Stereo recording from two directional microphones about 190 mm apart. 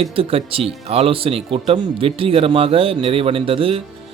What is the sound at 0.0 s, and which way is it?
A man's voice, 30° right (ahead or behind).